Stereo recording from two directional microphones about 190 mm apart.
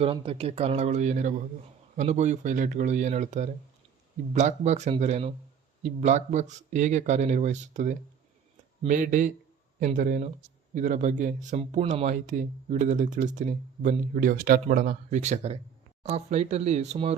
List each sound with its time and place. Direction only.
0.0 s speech: 30° right (ahead or behind)